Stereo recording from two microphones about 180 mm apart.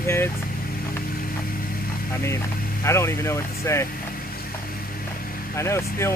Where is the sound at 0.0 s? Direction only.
15° left (ahead or behind).